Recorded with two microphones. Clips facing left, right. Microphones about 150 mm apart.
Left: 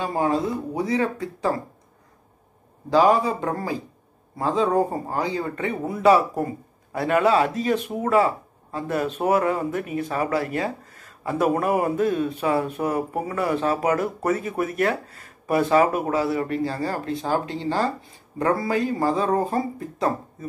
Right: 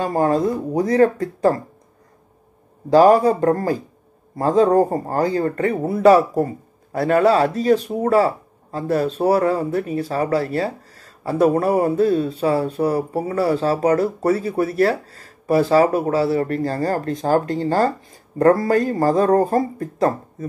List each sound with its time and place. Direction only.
0.0 s speech: 45° right (ahead or behind)
2.9 s speech: 45° right (ahead or behind)